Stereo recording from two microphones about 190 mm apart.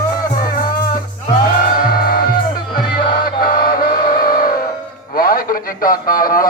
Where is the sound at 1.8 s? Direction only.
50° left (ahead or behind).